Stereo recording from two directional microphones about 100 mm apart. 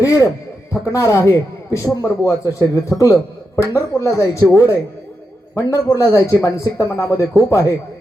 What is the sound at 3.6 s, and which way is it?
A man's voice, 30° left (ahead or behind).